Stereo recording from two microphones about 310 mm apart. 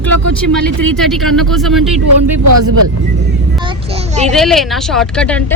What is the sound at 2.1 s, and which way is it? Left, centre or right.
Speech, right.